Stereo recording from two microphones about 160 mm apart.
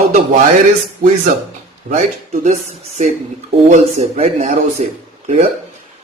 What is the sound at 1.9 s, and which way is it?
Speech, 45° right (ahead or behind).